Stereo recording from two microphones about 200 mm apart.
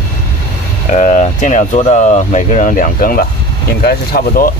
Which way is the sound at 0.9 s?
35° left (ahead or behind).